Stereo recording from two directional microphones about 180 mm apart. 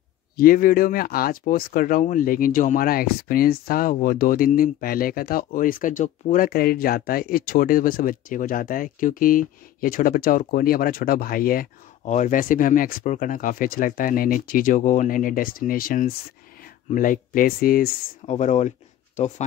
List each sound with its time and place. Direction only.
0.4 s speech: 50° left (ahead or behind)
18.2 s speech: 40° left (ahead or behind)